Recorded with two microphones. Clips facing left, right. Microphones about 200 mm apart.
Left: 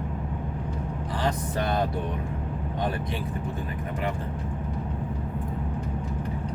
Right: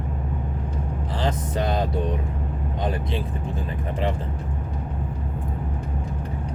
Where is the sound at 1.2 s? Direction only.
20° right (ahead or behind).